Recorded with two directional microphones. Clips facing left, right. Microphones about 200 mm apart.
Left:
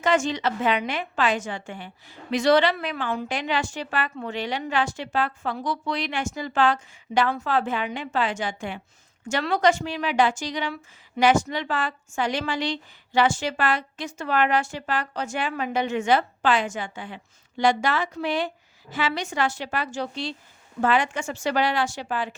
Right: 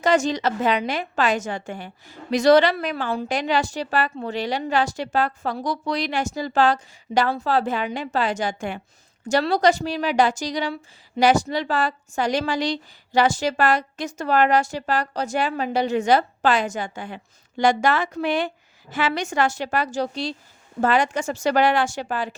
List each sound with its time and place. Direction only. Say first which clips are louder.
0.0 s a woman's voice: right 3 dB; 40° right (ahead or behind)